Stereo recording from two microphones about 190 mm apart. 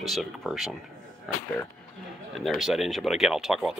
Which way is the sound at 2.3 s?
Centre (ahead or behind).